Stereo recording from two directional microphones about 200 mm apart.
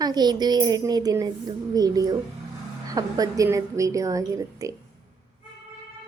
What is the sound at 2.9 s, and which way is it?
A woman's voice, 20° right (ahead or behind).